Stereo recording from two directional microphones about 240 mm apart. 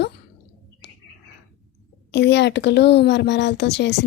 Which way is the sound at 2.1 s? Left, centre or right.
Left.